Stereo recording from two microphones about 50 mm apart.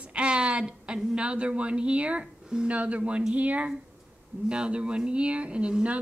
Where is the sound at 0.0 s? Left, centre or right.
Right.